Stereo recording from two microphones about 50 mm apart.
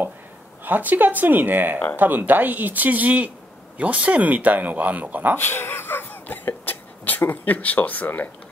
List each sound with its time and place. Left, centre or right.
0.7 s speech: right
5.4 s speech: left
6.2 s a sound: left